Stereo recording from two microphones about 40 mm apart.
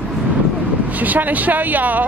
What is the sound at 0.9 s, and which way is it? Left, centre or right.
Speech, right.